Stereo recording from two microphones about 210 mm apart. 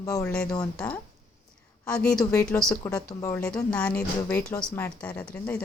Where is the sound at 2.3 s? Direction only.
15° left (ahead or behind).